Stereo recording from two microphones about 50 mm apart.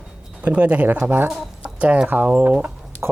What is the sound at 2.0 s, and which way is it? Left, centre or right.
Speech, right.